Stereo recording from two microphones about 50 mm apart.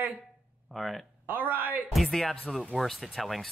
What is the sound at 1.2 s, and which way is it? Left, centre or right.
Speech, right.